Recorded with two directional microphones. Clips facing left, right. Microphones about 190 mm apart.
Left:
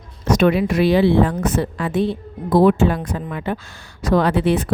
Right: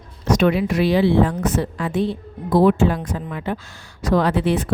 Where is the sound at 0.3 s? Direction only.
55° left (ahead or behind).